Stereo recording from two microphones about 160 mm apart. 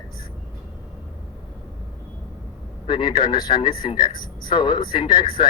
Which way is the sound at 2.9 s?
30° left (ahead or behind).